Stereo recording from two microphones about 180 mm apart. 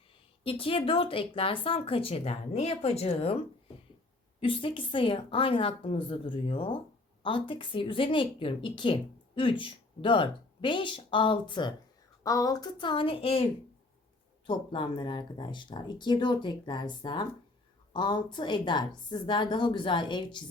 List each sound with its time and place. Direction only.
0.4 s speech: 30° left (ahead or behind)
4.4 s speech: 30° left (ahead or behind)